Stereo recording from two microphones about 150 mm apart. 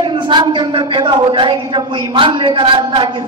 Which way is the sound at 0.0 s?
30° right (ahead or behind).